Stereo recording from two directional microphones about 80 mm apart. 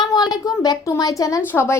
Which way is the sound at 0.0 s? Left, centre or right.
Left.